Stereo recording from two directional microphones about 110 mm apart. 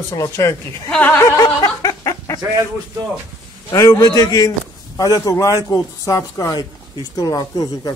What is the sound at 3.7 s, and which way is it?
A man's voice, 30° left (ahead or behind).